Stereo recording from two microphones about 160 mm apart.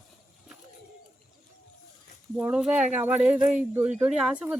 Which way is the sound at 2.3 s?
10° right (ahead or behind).